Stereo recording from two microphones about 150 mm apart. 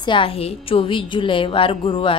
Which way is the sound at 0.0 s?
35° left (ahead or behind).